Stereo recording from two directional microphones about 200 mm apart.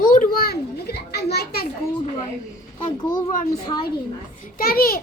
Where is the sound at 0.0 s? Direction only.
40° left (ahead or behind).